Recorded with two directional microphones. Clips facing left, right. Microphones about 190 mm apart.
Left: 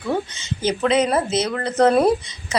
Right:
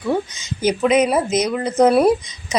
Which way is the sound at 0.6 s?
15° right (ahead or behind).